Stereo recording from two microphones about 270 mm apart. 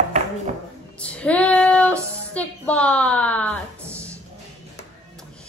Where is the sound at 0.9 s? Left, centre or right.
Centre.